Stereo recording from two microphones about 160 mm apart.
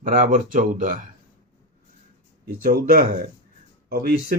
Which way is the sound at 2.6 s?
60° right (ahead or behind).